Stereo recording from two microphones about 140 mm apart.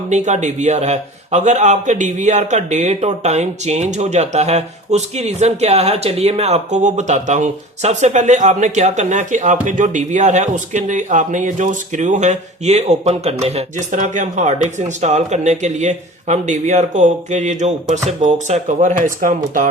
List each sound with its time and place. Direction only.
0.1 s a man's voice: 55° right (ahead or behind)